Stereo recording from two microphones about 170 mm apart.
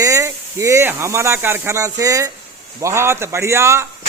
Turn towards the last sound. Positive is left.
turn(degrees=-15)  # may be behind; listen again after turning